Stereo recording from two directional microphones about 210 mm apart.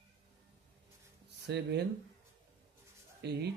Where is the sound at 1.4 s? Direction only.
55° right (ahead or behind).